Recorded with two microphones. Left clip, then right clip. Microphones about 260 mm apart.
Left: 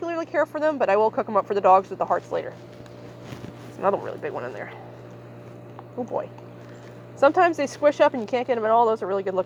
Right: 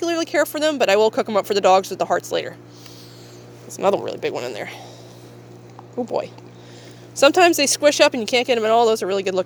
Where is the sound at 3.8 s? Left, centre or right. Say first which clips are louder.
Right 5 dB; right.